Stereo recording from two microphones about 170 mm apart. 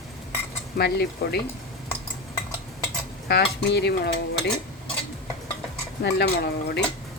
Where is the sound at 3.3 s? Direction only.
75° left (ahead or behind).